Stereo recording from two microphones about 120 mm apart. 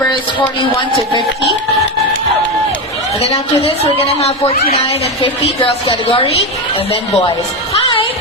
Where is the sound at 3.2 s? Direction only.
55° left (ahead or behind).